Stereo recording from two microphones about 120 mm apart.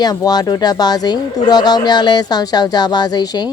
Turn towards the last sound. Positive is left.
turn(degrees=35)  # may be behind; listen again after turning